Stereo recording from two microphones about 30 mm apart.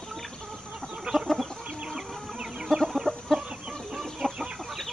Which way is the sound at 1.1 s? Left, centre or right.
Right.